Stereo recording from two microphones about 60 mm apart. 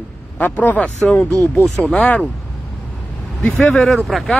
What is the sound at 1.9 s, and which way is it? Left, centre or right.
Speech, left.